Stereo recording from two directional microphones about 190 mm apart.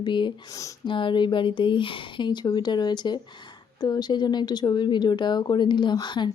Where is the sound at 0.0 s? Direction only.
25° left (ahead or behind).